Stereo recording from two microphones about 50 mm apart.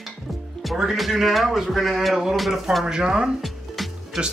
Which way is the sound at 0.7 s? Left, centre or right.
Centre.